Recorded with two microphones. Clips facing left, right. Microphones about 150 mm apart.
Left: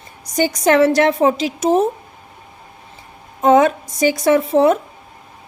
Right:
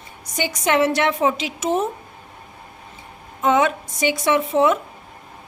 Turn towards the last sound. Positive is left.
turn(degrees=35)  # may be behind; listen again after turning